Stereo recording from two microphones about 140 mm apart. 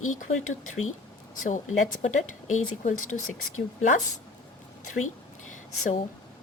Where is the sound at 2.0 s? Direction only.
60° left (ahead or behind).